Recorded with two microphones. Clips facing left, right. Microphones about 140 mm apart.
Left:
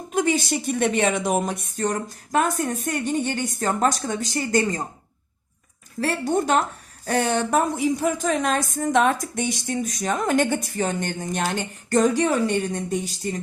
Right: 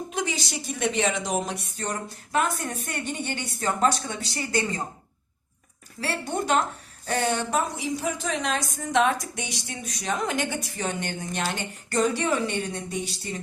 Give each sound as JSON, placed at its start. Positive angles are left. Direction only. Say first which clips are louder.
{"t": 0.1, "sound": "a woman's voice", "louder": "left 12 dB", "side_deg": 50}
{"t": 6.0, "sound": "a woman's voice", "louder": "left 6 dB", "side_deg": 45}